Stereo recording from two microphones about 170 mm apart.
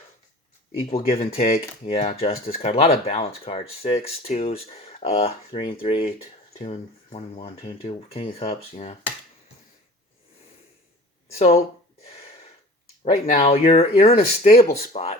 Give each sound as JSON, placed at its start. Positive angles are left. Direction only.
{"t": 0.9, "sound": "speech", "side_deg": 35}
{"t": 11.3, "sound": "speech", "side_deg": 35}
{"t": 12.0, "sound": "a sound", "side_deg": 40}
{"t": 13.1, "sound": "speech", "side_deg": 45}